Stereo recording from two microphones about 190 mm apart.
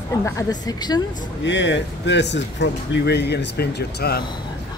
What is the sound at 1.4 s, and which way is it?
Speech, 70° left (ahead or behind).